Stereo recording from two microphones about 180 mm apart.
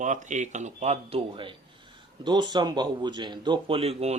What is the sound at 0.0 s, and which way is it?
Speech, 40° right (ahead or behind).